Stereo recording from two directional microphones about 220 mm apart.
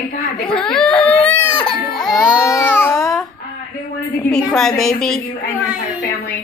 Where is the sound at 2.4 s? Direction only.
15° left (ahead or behind).